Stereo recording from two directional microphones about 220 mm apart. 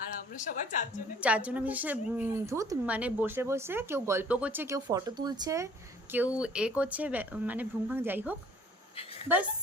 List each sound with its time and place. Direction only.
0.3 s a woman's voice: 35° left (ahead or behind)
1.2 s a woman's voice: 5° right (ahead or behind)